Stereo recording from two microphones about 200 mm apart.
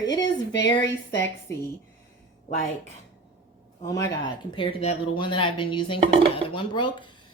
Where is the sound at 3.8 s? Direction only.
15° left (ahead or behind).